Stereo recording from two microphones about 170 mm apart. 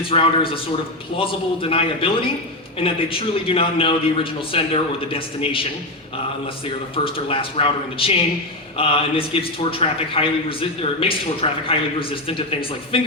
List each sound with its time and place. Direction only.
0.1 s a man's voice: 30° left (ahead or behind)
6.9 s a man's voice: 30° left (ahead or behind)